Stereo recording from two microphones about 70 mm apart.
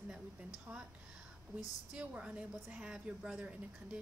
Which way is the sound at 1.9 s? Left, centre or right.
Centre.